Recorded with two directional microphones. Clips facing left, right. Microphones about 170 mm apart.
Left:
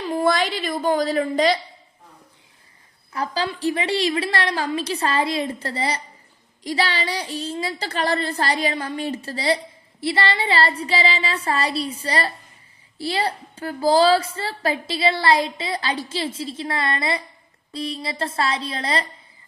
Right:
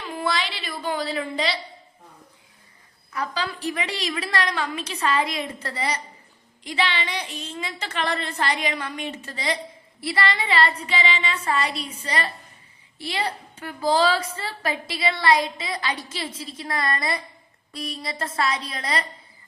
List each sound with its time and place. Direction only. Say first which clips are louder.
0.1 s a woman's voice: left 7 dB; 45° left (ahead or behind)
3.1 s a woman's voice: left 3 dB; 30° left (ahead or behind)